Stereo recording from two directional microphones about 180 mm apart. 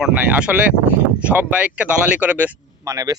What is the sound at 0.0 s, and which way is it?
Speech, 5° right (ahead or behind).